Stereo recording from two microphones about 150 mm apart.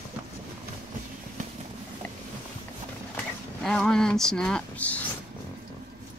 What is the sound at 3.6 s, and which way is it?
Speech, 5° left (ahead or behind).